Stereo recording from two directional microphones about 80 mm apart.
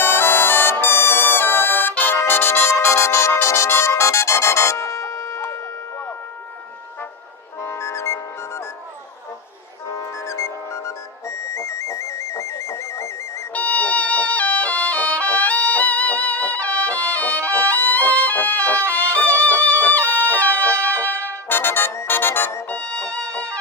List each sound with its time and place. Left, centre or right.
0.0 s music: left
7.6 s music: left
9.9 s music: left
13.5 s music: centre
20.7 s music: right
21.1 s brass instrument: right
21.5 s music: left
22.7 s music: centre